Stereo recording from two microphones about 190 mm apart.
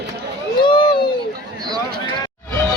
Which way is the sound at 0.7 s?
25° left (ahead or behind).